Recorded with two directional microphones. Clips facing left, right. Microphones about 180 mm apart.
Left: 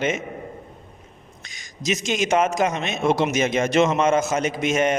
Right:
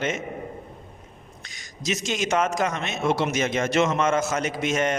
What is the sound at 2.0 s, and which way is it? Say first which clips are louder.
A man's voice: left 4 dB; 20° left (ahead or behind).